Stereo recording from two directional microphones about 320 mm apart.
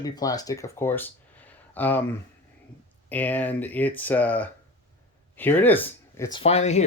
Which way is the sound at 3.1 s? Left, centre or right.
Centre.